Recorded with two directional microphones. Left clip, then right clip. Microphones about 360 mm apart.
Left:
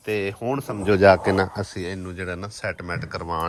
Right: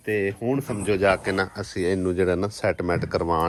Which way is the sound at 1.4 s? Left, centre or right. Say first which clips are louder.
Right 3 dB; centre.